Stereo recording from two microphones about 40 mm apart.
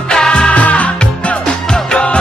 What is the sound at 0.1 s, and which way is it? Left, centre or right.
Music, left.